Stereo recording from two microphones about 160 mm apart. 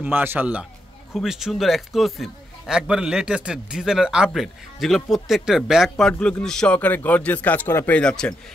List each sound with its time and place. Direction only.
0.0 s a man's voice: 10° right (ahead or behind); by 8.4 s 5° left (ahead or behind)